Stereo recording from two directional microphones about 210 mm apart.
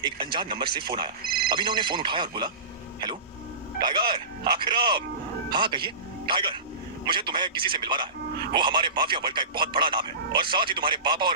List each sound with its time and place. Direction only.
0.0 s a man's voice: 20° right (ahead or behind)
1.2 s speech: 45° right (ahead or behind)
1.5 s a man's voice: 20° right (ahead or behind)
3.8 s a man's voice: 20° right (ahead or behind)